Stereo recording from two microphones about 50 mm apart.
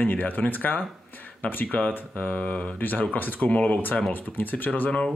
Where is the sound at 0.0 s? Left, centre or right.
Left.